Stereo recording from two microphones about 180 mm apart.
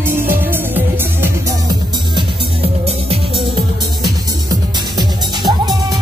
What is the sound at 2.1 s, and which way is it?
Music, 30° right (ahead or behind).